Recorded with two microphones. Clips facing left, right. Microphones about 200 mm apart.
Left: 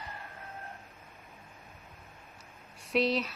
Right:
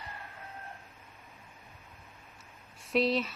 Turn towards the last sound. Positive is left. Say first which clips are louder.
# even
turn(degrees=0)  # may be behind; listen again after turning